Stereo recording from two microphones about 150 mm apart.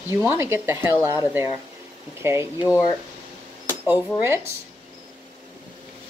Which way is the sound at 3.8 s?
15° right (ahead or behind).